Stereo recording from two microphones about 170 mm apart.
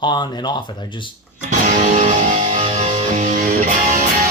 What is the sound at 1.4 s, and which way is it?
Music, 45° right (ahead or behind).